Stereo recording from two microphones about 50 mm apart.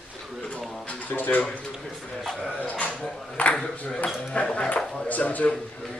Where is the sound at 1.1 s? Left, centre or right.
Left.